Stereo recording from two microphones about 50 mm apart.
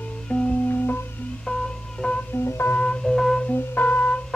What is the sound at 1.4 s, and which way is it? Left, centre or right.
Music, centre.